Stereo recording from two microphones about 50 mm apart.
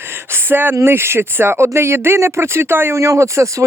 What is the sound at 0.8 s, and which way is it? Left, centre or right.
Speech, right.